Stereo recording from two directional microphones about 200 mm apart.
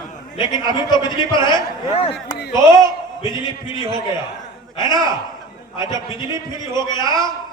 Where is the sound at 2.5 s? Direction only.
15° right (ahead or behind).